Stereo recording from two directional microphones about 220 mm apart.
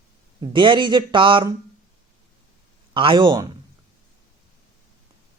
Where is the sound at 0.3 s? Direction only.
20° right (ahead or behind).